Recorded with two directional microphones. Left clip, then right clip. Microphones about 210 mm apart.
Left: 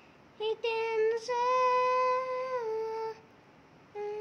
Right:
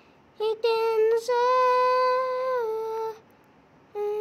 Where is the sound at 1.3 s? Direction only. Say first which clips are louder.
Right 6 dB; 30° right (ahead or behind).